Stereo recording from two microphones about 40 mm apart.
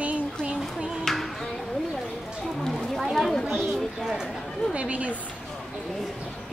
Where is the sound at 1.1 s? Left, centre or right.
Centre.